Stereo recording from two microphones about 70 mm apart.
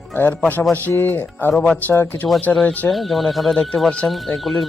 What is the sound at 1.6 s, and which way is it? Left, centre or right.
Speech, centre.